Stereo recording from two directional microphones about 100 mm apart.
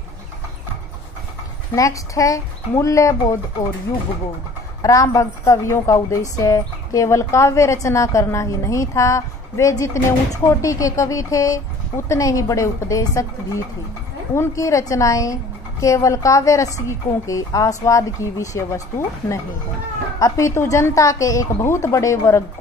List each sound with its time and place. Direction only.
1.8 s speech: 35° left (ahead or behind)
4.8 s speech: 30° left (ahead or behind)
14.3 s speech: 30° left (ahead or behind)